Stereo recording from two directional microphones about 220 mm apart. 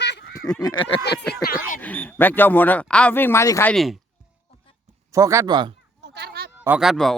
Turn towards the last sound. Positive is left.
turn(degrees=0)  # may be behind; listen again after turning